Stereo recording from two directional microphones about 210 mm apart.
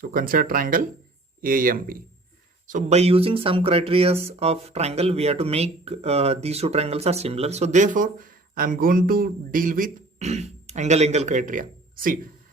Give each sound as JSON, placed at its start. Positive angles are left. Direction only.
{"t": 0.0, "sound": "speech", "side_deg": -40}